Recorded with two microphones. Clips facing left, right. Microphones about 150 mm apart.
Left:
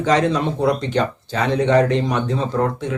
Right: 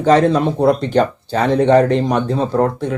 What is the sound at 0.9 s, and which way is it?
Speech, 35° right (ahead or behind).